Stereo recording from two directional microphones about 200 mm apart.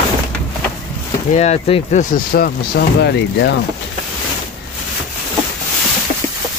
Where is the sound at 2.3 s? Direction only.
50° left (ahead or behind).